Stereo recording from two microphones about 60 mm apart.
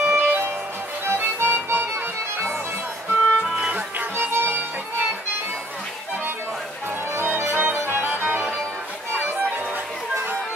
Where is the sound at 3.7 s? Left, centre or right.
Right.